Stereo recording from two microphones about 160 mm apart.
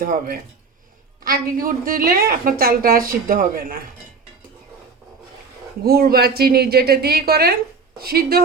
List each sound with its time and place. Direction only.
0.0 s a woman's voice: 60° right (ahead or behind)
5.8 s a woman's voice: 75° right (ahead or behind)